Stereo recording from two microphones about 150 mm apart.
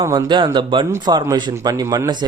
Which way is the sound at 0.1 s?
30° right (ahead or behind).